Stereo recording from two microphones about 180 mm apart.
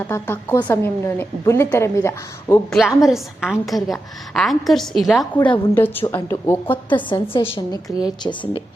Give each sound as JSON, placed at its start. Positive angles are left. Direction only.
{"t": 0.0, "sound": "a woman's voice", "side_deg": 10}
{"t": 2.6, "sound": "a woman's voice", "side_deg": 0}
{"t": 5.7, "sound": "a woman's voice", "side_deg": 10}
{"t": 6.9, "sound": "a woman's voice", "side_deg": 25}